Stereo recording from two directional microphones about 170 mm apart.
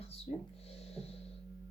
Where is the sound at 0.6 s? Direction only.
35° left (ahead or behind).